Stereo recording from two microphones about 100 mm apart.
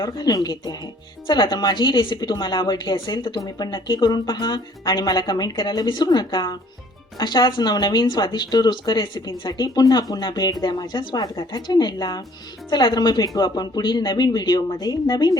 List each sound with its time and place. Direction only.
0.0 s a woman's voice: 40° left (ahead or behind)